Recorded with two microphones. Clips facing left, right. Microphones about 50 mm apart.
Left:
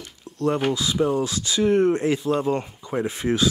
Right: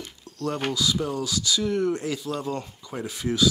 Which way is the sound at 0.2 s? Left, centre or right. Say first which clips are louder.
Left 7 dB; left.